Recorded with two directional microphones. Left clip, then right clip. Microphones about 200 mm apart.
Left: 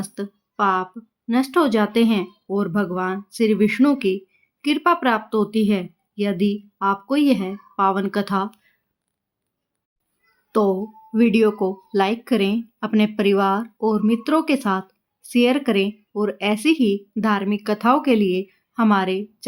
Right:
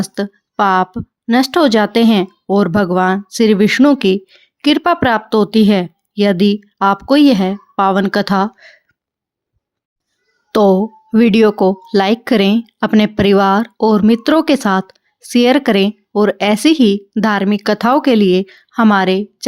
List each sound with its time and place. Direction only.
0.0 s speech: 45° right (ahead or behind)
10.5 s speech: 45° right (ahead or behind)